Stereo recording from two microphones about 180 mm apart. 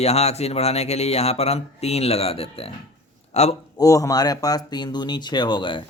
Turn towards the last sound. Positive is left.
turn(degrees=25)  # may be behind; listen again after turning